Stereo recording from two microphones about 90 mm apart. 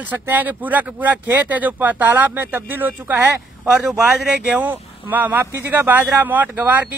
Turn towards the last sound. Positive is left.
turn(degrees=-20)  # may be behind; listen again after turning